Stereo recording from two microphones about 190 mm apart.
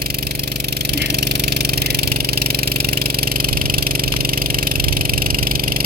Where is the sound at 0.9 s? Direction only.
55° right (ahead or behind).